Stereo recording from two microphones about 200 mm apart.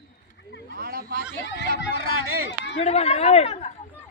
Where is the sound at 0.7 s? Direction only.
45° right (ahead or behind).